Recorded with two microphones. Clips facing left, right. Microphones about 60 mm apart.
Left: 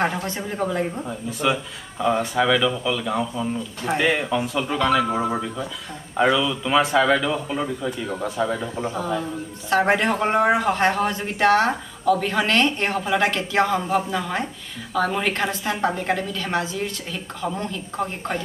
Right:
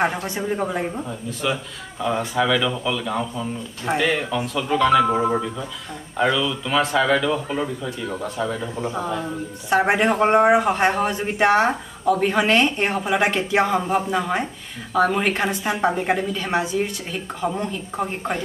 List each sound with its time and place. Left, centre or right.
0.0 s a man's voice: centre
1.0 s speech: centre
8.9 s a man's voice: centre